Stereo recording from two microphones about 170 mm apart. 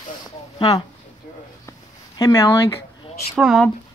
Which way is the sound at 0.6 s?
25° left (ahead or behind).